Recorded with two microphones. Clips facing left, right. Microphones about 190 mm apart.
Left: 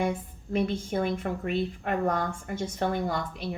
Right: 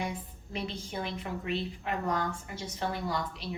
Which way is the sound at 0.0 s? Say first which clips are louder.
Left 7 dB; 50° left (ahead or behind).